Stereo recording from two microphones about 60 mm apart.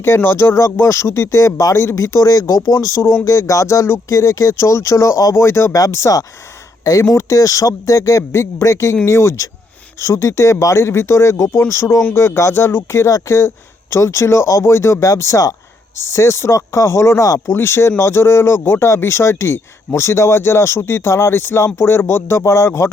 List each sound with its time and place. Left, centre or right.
0.2 s speech: left
4.1 s speech: left
5.9 s speech: left
6.8 s speech: left
7.2 s speech: left
15.1 s speech: left
16.0 s speech: left
17.5 s speech: left